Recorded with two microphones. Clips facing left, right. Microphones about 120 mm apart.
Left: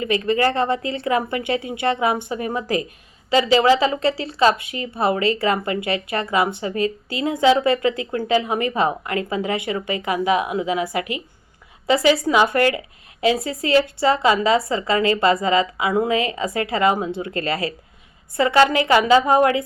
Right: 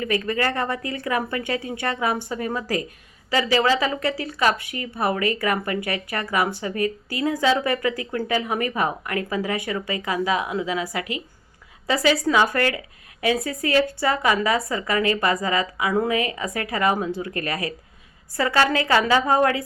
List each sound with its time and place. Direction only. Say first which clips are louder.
0.0 s speech: left 4 dB; 20° left (ahead or behind)